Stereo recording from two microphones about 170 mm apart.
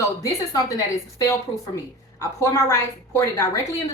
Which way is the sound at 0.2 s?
20° left (ahead or behind).